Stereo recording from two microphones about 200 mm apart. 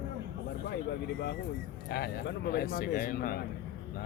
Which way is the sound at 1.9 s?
50° left (ahead or behind).